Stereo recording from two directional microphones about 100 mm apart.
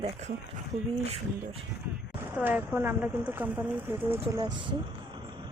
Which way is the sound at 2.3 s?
15° right (ahead or behind).